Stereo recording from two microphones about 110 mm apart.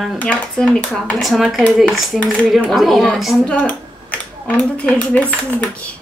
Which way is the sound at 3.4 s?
10° left (ahead or behind).